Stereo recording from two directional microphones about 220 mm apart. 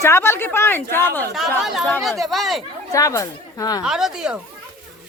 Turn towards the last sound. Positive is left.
turn(degrees=-5)  # may be behind; listen again after turning